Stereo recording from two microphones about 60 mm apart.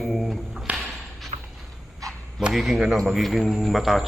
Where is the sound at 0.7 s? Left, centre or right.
Right.